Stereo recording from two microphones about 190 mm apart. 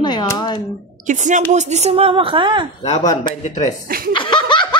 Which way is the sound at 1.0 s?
40° right (ahead or behind).